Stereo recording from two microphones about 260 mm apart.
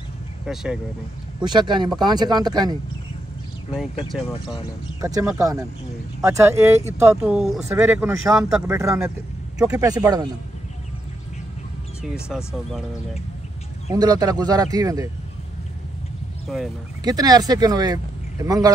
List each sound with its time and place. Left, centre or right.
1.4 s speech: centre
3.7 s speech: centre
5.0 s speech: centre
12.0 s speech: centre
13.8 s speech: centre
16.5 s speech: centre
17.0 s speech: centre